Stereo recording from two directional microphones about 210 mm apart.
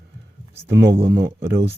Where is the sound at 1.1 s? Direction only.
50° right (ahead or behind).